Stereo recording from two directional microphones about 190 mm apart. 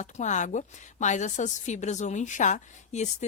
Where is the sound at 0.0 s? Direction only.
40° left (ahead or behind).